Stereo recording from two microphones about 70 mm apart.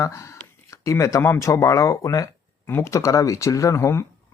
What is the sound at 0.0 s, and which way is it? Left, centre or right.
Speech, left.